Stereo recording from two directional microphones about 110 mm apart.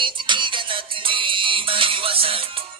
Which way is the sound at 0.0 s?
45° right (ahead or behind).